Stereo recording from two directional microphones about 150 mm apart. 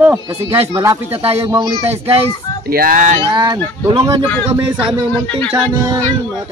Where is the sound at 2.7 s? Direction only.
75° right (ahead or behind).